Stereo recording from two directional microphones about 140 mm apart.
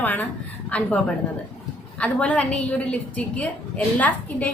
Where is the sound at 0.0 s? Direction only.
10° left (ahead or behind).